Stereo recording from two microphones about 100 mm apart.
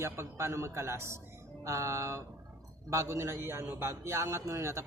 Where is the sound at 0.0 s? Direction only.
30° right (ahead or behind).